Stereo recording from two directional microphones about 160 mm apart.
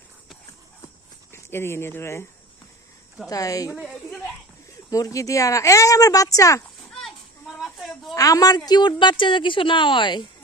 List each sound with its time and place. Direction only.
1.3 s speech: 15° left (ahead or behind)
3.2 s a woman's voice: 20° left (ahead or behind)
3.7 s speech: centre (ahead or behind)
4.9 s a woman's voice: 20° left (ahead or behind)
6.9 s a sound: centre (ahead or behind)
8.1 s a woman's voice: 20° left (ahead or behind)